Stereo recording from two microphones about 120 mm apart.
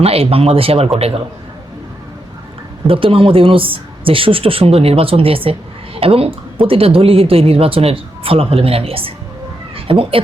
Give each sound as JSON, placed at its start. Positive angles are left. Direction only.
{"t": 0.0, "sound": "speech", "side_deg": -55}
{"t": 2.8, "sound": "speech", "side_deg": -50}